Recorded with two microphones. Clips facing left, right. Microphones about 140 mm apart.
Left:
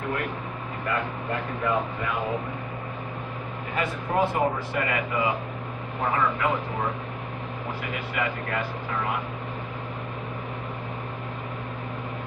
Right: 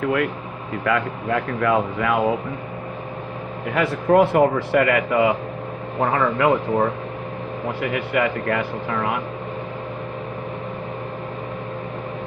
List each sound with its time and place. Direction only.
0.9 s speech: 90° right
3.8 s a man's voice: 70° right (ahead or behind)